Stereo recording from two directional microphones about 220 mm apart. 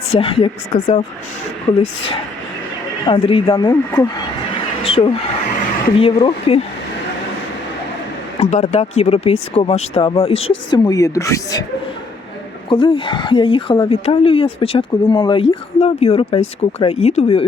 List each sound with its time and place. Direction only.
0.1 s speech: 25° left (ahead or behind)
3.1 s speech: 25° left (ahead or behind)
8.4 s speech: 30° left (ahead or behind); by 11.6 s 15° left (ahead or behind)
12.6 s speech: 25° left (ahead or behind)